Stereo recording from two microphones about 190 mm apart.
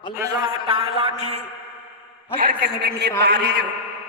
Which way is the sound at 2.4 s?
50° right (ahead or behind).